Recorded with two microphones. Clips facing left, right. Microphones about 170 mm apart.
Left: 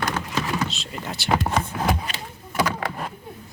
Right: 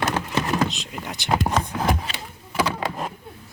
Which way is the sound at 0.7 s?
15° right (ahead or behind).